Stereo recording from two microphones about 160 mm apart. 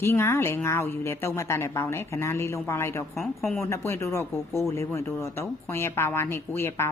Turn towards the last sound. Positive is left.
turn(degrees=15)  # may be behind; listen again after turning